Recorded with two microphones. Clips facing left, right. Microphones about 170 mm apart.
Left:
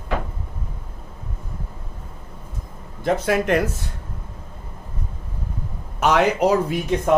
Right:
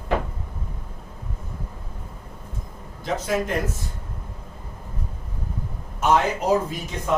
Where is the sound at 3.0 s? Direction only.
65° left (ahead or behind).